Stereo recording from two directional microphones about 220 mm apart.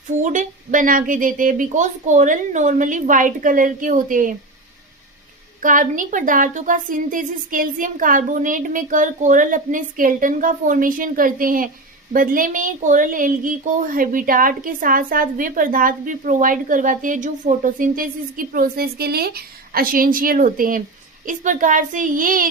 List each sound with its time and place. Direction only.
0.2 s speech: 35° right (ahead or behind)
5.6 s speech: 35° right (ahead or behind)